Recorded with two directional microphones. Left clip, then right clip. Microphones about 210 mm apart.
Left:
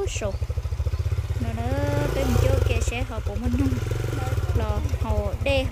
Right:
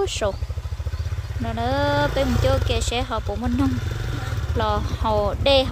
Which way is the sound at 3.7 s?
50° left (ahead or behind).